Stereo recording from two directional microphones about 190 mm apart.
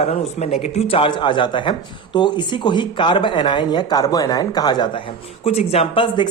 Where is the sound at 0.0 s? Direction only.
35° left (ahead or behind).